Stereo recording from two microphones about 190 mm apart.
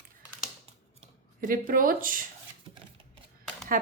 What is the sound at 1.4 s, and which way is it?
Speech, 45° right (ahead or behind).